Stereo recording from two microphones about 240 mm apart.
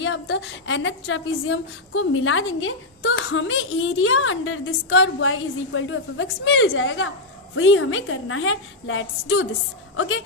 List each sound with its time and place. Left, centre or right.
0.0 s a woman's voice: left